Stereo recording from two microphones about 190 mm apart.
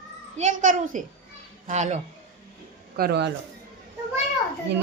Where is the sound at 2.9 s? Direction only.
55° right (ahead or behind).